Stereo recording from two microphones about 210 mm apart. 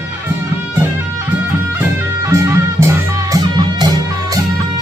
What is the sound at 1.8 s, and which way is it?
Music, 15° right (ahead or behind).